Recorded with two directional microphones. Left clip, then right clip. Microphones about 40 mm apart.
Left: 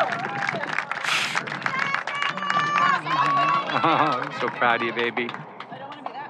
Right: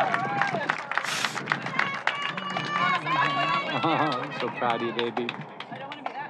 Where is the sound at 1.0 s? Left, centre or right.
Left.